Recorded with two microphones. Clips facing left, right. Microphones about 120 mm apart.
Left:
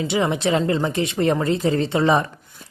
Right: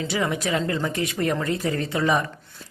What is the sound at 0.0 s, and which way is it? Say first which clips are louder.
A woman's voice: left 4 dB; 25° left (ahead or behind).